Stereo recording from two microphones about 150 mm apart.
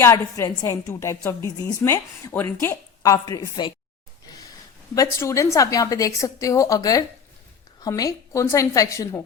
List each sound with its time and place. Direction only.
0.0 s a woman's voice: 20° left (ahead or behind)
4.9 s a woman's voice: 20° left (ahead or behind)